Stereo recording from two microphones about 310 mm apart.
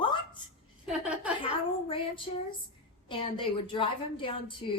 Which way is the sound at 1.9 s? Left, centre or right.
Centre.